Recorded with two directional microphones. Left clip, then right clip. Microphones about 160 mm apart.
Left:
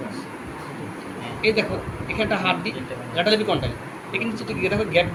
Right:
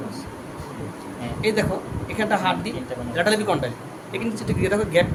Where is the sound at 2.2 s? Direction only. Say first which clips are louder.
Right 1 dB; 35° right (ahead or behind).